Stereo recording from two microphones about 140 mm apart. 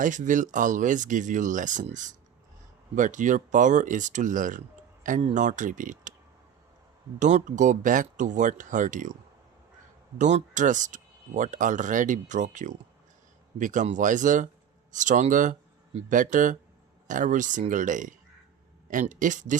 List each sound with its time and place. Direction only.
0.0 s speech: 65° right (ahead or behind)
7.2 s speech: 60° right (ahead or behind)
10.2 s speech: 60° right (ahead or behind)